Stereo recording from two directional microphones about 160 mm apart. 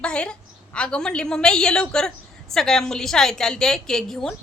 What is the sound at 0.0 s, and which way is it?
A woman's voice, 5° left (ahead or behind).